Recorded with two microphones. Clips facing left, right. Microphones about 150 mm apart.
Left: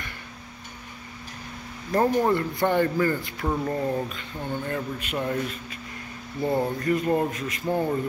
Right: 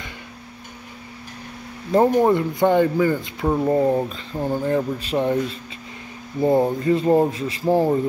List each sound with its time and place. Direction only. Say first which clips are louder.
1.9 s speech: right 6 dB; 20° right (ahead or behind)